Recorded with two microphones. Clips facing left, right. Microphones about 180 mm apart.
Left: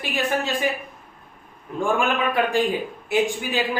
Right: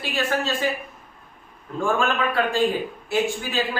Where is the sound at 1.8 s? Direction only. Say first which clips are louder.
Left 1 dB; 15° left (ahead or behind).